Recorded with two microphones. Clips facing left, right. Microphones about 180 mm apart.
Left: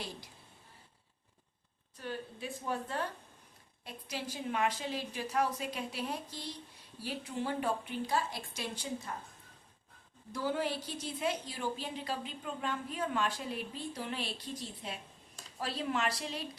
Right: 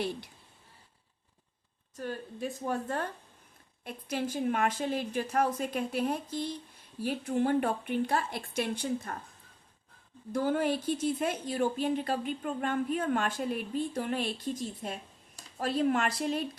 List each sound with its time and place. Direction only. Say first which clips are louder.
2.0 s a woman's voice: right 5 dB; 45° right (ahead or behind)
10.3 s a woman's voice: right 6 dB; 50° right (ahead or behind)